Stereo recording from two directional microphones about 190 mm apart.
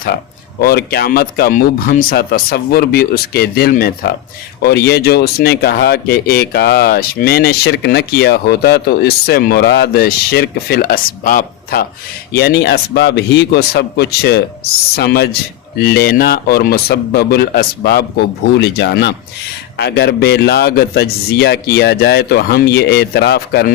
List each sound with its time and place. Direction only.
0.6 s a man's voice: 55° left (ahead or behind)
18.5 s speech: 65° left (ahead or behind)